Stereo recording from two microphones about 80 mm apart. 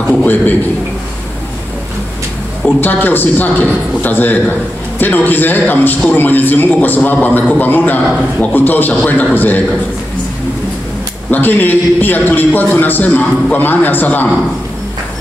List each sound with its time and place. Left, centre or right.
0.2 s a man's voice: left
2.8 s a man's voice: left
11.2 s a man's voice: left